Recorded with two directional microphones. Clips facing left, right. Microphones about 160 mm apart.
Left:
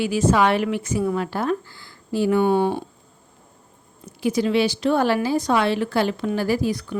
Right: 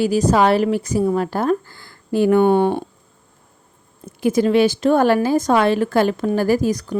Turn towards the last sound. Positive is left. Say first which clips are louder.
# right 4 dB
turn(degrees=-40)  # may be behind; listen again after turning